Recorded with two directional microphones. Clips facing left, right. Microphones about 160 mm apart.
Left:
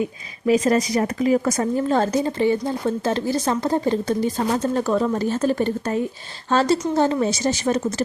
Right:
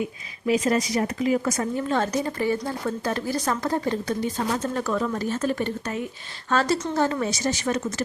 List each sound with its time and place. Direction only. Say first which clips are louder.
0.4 s speech: left 4 dB; 40° left (ahead or behind)